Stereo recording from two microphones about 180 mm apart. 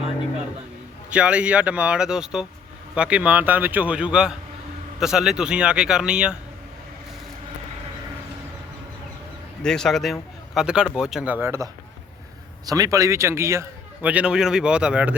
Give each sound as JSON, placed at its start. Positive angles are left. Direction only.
{"t": 1.1, "sound": "a man's voice", "side_deg": -5}
{"t": 9.6, "sound": "a man's voice", "side_deg": 5}